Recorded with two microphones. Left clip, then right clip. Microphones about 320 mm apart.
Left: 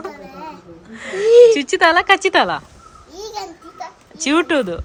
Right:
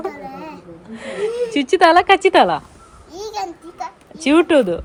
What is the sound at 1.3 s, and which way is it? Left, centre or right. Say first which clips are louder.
Speech: left 17 dB; left.